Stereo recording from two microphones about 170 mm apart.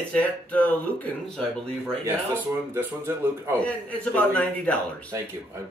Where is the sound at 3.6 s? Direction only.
10° left (ahead or behind).